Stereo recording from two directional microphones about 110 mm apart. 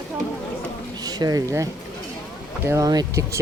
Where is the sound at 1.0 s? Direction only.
35° right (ahead or behind).